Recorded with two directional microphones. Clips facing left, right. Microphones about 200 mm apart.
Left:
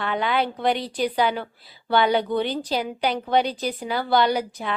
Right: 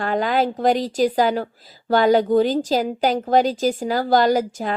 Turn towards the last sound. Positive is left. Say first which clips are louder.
# right 5 dB
turn(degrees=-45)  # may be behind; listen again after turning